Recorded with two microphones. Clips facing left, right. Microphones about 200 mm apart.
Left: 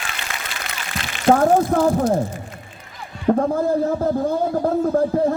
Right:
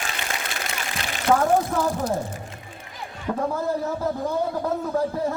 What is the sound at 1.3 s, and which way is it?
Speech, 45° left (ahead or behind).